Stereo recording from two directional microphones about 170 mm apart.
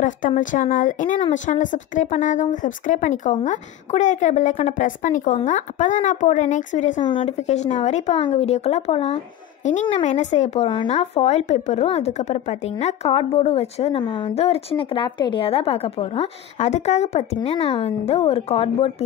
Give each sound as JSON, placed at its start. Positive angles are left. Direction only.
{"t": 0.0, "sound": "speech", "side_deg": 50}
{"t": 7.0, "sound": "a woman's voice", "side_deg": 30}